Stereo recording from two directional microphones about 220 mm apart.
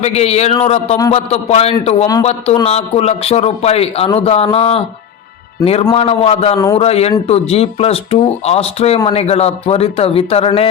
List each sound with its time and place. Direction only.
0.0 s a man's voice: 30° left (ahead or behind)
5.9 s a man's voice: 25° left (ahead or behind)
6.6 s a man's voice: 15° left (ahead or behind)
6.8 s a man's voice: 30° left (ahead or behind)